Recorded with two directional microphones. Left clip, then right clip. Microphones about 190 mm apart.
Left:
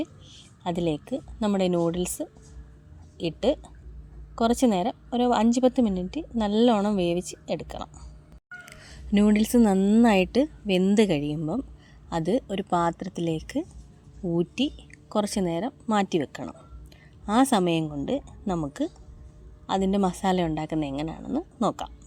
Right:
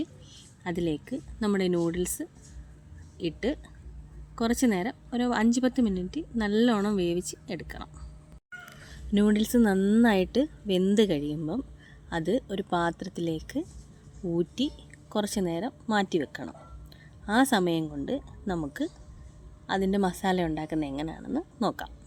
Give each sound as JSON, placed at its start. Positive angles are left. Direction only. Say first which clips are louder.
{"t": 0.0, "sound": "a woman's voice", "louder": "left 3 dB", "side_deg": 20}
{"t": 8.7, "sound": "a woman's voice", "louder": "left 3 dB", "side_deg": 35}